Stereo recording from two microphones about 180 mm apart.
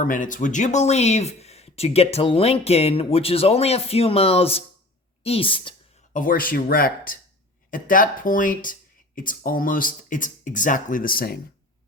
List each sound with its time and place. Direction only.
0.0 s a woman's voice: 45° left (ahead or behind); by 5.7 s 30° left (ahead or behind)
6.1 s speech: 50° left (ahead or behind)